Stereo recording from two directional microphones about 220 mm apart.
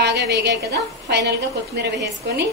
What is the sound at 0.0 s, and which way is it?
Speech, 45° right (ahead or behind).